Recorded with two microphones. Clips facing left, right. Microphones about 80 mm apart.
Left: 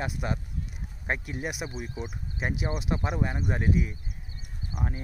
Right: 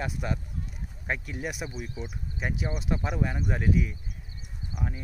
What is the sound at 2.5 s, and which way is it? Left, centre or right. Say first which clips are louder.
Speech: even; centre.